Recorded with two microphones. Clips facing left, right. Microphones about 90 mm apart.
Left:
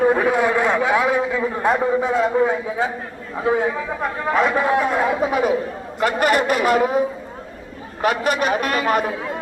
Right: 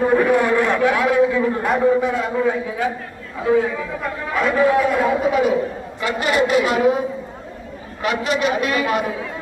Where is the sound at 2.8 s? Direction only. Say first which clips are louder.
Right 2 dB; 25° left (ahead or behind).